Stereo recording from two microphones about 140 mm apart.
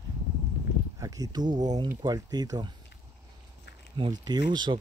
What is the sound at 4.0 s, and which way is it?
Speech, 30° right (ahead or behind).